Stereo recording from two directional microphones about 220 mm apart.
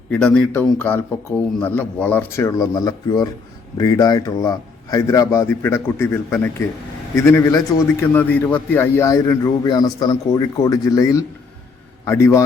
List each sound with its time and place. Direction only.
0.1 s a man's voice: 5° left (ahead or behind)